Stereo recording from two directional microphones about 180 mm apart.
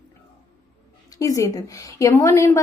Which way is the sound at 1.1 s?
20° left (ahead or behind).